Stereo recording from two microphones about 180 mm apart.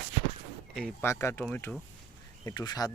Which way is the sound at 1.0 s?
15° left (ahead or behind).